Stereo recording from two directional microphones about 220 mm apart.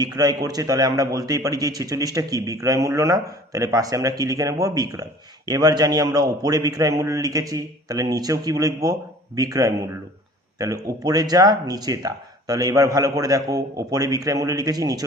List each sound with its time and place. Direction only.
0.0 s a man's voice: 20° right (ahead or behind)